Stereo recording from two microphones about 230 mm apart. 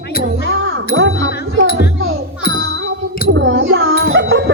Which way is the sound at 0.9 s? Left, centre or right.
Right.